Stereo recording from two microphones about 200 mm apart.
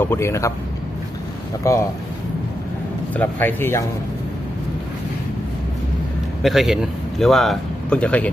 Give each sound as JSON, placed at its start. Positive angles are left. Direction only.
{"t": 0.0, "sound": "speech", "side_deg": 10}
{"t": 1.6, "sound": "speech", "side_deg": 15}
{"t": 3.2, "sound": "speech", "side_deg": 10}
{"t": 6.4, "sound": "speech", "side_deg": 0}